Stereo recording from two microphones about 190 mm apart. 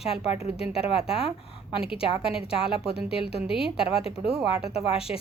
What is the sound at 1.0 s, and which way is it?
A woman's voice, 30° left (ahead or behind).